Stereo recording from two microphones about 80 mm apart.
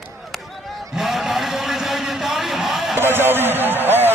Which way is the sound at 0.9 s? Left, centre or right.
Centre.